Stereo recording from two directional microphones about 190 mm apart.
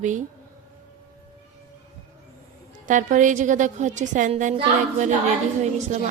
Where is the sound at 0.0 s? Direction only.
40° right (ahead or behind).